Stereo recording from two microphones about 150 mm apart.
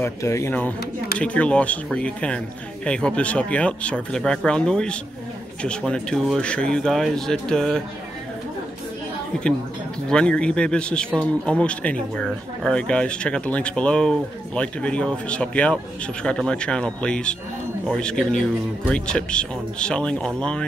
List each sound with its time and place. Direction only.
0.0 s speech: 20° left (ahead or behind); by 7.8 s 5° left (ahead or behind)
10.0 s speech: 5° left (ahead or behind)